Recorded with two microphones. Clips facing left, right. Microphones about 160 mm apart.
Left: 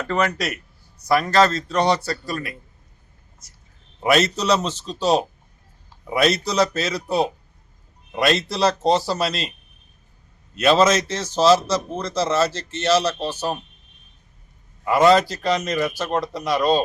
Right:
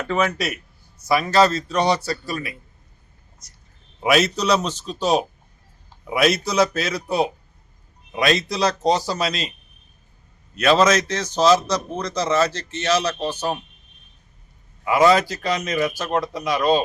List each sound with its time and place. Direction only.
0.1 s a man's voice: 5° right (ahead or behind)
4.0 s a man's voice: centre (ahead or behind)
10.6 s a man's voice: 5° left (ahead or behind)
14.8 s a man's voice: centre (ahead or behind)